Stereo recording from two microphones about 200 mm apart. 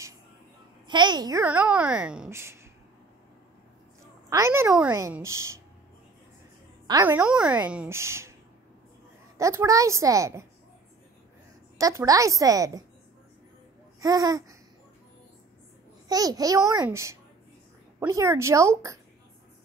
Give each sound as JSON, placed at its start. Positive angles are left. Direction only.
{"t": 0.8, "sound": "a child's voice", "side_deg": -20}
{"t": 1.4, "sound": "a woman's voice", "side_deg": -10}
{"t": 4.3, "sound": "a woman's voice", "side_deg": -15}
{"t": 7.1, "sound": "a woman's voice", "side_deg": -5}
{"t": 9.4, "sound": "a woman's voice", "side_deg": -15}
{"t": 11.8, "sound": "a woman's voice", "side_deg": -15}
{"t": 14.0, "sound": "a woman's voice", "side_deg": -20}
{"t": 16.1, "sound": "a woman's voice", "side_deg": -20}